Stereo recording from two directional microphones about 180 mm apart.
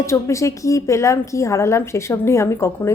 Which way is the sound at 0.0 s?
15° left (ahead or behind).